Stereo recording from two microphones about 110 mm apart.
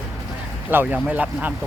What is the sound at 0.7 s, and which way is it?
Speech, 20° right (ahead or behind).